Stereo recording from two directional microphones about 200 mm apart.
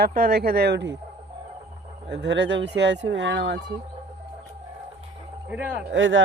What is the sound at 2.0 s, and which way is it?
Speech, 60° right (ahead or behind).